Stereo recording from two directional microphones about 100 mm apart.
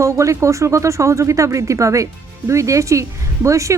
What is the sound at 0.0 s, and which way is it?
Speech, 30° right (ahead or behind).